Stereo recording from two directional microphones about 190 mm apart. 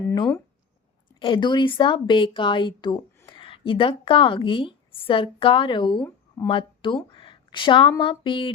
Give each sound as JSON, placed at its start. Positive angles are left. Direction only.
{"t": 1.2, "sound": "a woman's voice", "side_deg": 25}
{"t": 6.0, "sound": "a sound", "side_deg": 10}
{"t": 6.5, "sound": "a woman's voice", "side_deg": 25}